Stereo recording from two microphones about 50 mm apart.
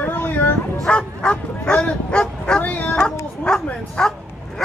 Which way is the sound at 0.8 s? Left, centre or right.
Left.